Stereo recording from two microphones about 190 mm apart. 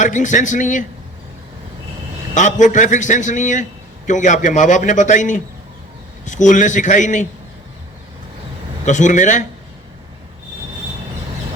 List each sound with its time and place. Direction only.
0.0 s a man's voice: 40° left (ahead or behind)
2.3 s a man's voice: 40° left (ahead or behind)
8.8 s a man's voice: 40° left (ahead or behind)